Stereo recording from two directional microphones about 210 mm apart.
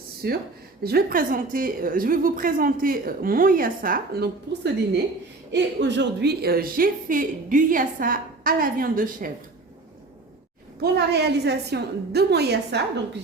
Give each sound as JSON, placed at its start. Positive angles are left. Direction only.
{"t": 0.2, "sound": "a woman's voice", "side_deg": -50}
{"t": 10.8, "sound": "a woman's voice", "side_deg": -50}